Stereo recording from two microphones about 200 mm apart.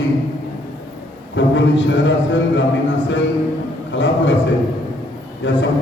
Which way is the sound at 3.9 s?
65° left (ahead or behind).